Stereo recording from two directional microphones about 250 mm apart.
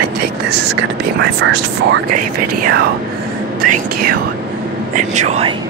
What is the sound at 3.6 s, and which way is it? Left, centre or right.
Speech, right.